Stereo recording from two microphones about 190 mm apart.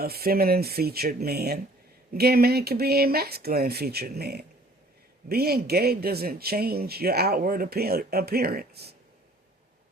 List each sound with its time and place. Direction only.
0.0 s speech: 55° right (ahead or behind)